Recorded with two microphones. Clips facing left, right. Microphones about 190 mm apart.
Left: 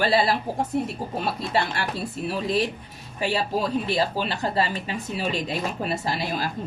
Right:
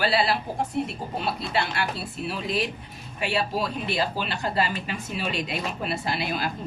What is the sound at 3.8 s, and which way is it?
Speech, 35° left (ahead or behind).